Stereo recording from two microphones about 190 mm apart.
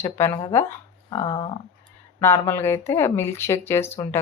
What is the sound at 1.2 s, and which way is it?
Speech, 25° left (ahead or behind).